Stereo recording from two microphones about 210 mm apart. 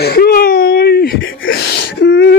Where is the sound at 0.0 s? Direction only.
45° left (ahead or behind).